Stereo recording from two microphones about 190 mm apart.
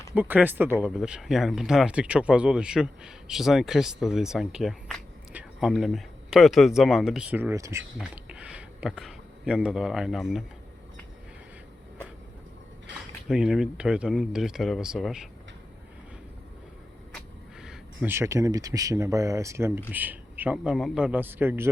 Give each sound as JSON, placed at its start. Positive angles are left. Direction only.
{"t": 0.1, "sound": "speech", "side_deg": -10}
{"t": 12.9, "sound": "a sound", "side_deg": -70}
{"t": 13.2, "sound": "speech", "side_deg": -5}
{"t": 17.6, "sound": "speech", "side_deg": -5}